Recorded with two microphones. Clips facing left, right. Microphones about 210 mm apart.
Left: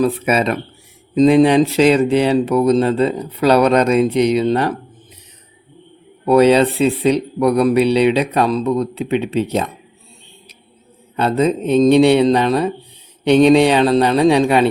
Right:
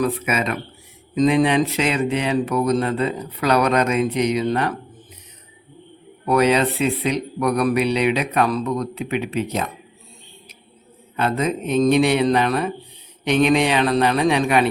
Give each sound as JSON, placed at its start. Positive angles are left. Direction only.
{"t": 0.0, "sound": "speech", "side_deg": 35}
{"t": 6.2, "sound": "speech", "side_deg": 30}
{"t": 11.2, "sound": "speech", "side_deg": 30}